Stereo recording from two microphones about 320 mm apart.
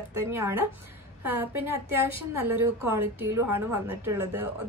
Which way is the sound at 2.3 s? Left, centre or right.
Centre.